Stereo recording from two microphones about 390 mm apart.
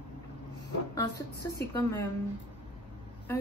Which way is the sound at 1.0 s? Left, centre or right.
Centre.